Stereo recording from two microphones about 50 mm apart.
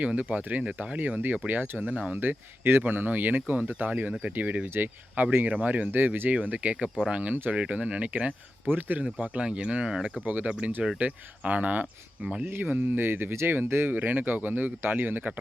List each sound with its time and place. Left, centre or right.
0.0 s speech: right
1.8 s speech: right
2.1 s speech: right
2.8 s speech: right
9.0 s speech: right
10.2 s speech: right
12.5 s speech: right
13.9 s speech: right